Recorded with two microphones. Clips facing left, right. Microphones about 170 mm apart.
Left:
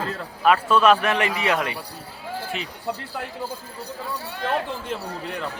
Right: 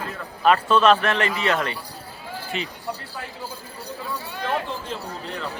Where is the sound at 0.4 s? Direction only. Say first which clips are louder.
Even; 5° left (ahead or behind).